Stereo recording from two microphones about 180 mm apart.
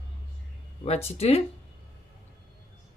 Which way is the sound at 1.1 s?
35° left (ahead or behind).